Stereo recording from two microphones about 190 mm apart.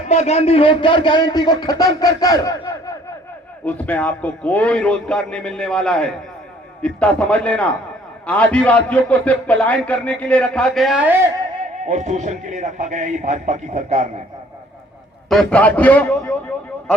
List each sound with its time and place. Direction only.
0.1 s speech: 35° left (ahead or behind); by 2.9 s 20° left (ahead or behind)
3.7 s a man's voice: 10° left (ahead or behind); by 11.3 s 10° right (ahead or behind)
11.9 s a man's voice: 40° right (ahead or behind)
15.3 s a man's voice: 5° left (ahead or behind)